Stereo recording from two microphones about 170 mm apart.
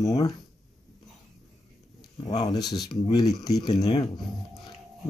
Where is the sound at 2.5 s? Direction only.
25° left (ahead or behind).